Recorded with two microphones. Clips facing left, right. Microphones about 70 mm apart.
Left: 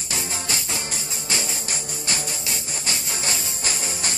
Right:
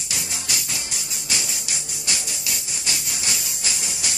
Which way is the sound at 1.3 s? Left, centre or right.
Left.